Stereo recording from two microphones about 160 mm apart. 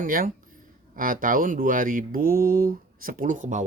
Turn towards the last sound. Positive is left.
turn(degrees=-50)  # may be behind; listen again after turning